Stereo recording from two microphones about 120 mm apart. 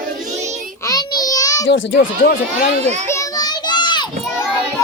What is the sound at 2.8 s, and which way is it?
Speech, 70° right (ahead or behind).